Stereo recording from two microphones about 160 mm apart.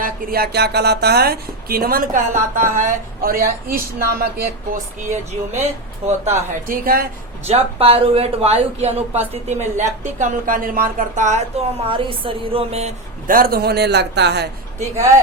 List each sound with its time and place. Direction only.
0.0 s speech: 70° right (ahead or behind)
5.6 s speech: 45° right (ahead or behind)
6.5 s a woman's voice: 60° right (ahead or behind)
7.4 s speech: 40° right (ahead or behind)
13.2 s a man's voice: 65° right (ahead or behind); by 14.5 s 90° right